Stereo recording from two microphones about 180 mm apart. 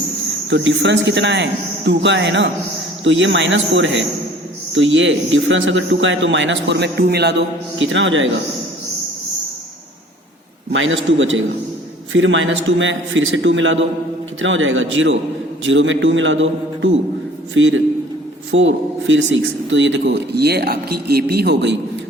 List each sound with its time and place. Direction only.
0.5 s a man's voice: 80° right
10.7 s a man's voice: 90° right; by 21.8 s 70° right (ahead or behind)